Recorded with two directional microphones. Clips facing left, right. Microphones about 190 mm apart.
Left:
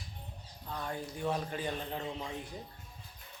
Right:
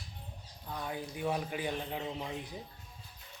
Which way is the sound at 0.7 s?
5° right (ahead or behind).